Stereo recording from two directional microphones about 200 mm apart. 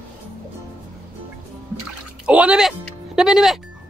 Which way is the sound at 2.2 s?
5° right (ahead or behind).